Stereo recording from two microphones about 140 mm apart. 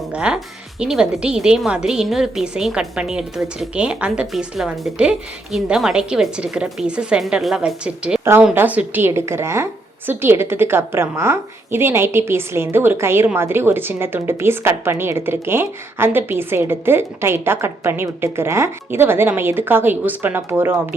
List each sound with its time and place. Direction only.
0.1 s a woman's voice: 5° right (ahead or behind)
8.2 s a woman's voice: 15° right (ahead or behind)